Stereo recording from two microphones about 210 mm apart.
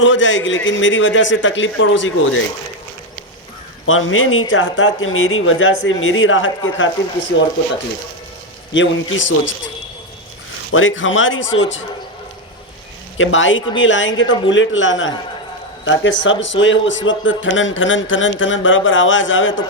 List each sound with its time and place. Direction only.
0.0 s a man's voice: 65° left (ahead or behind)
3.8 s speech: 70° left (ahead or behind)
8.7 s a man's voice: 65° left (ahead or behind)
10.7 s speech: 70° left (ahead or behind)
13.1 s a man's voice: 65° left (ahead or behind)